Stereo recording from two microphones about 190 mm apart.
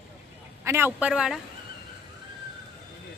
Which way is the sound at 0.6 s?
10° right (ahead or behind).